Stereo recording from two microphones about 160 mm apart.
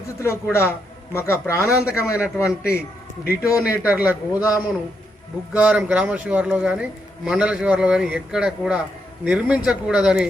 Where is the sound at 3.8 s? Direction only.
10° right (ahead or behind).